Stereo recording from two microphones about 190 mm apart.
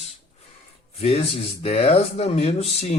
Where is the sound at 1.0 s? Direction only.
35° left (ahead or behind).